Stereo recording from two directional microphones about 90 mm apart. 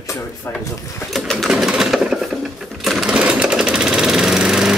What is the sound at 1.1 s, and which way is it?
Sewing machine, centre (ahead or behind).